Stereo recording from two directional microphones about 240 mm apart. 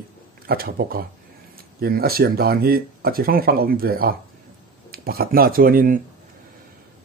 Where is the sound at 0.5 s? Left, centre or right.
Right.